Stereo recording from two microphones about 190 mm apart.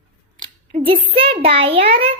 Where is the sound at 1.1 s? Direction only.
30° right (ahead or behind).